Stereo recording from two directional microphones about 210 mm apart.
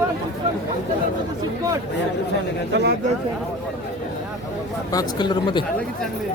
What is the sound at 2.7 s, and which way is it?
Speech, 50° right (ahead or behind).